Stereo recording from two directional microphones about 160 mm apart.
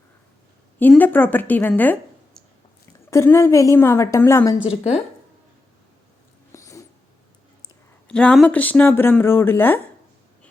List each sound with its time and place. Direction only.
0.8 s a woman's voice: 10° left (ahead or behind)
4.6 s speech: 40° left (ahead or behind)
6.5 s a sound: 20° left (ahead or behind)
7.6 s speech: 5° left (ahead or behind)